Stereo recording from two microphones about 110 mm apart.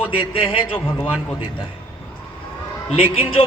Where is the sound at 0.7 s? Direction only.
15° left (ahead or behind).